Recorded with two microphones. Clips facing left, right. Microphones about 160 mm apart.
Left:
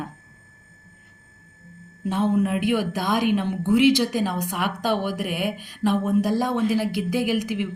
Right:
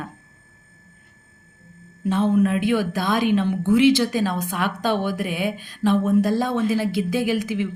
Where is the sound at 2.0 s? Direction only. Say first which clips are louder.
Right 3 dB; 15° left (ahead or behind).